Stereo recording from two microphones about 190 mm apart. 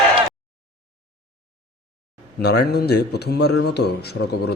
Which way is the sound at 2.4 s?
60° left (ahead or behind).